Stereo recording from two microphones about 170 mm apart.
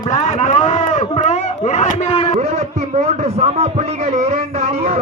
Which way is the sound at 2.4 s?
40° right (ahead or behind).